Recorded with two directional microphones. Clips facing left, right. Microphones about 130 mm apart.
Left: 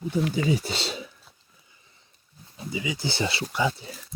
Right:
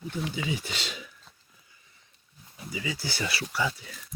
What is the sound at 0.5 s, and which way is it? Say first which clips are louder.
Speech: left 7 dB; 35° left (ahead or behind).